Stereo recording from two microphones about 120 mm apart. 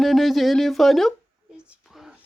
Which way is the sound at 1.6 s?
5° right (ahead or behind).